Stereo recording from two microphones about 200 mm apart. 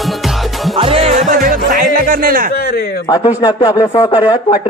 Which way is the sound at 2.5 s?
50° left (ahead or behind).